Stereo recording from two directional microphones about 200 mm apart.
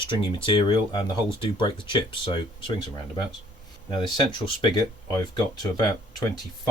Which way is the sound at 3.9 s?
25° left (ahead or behind).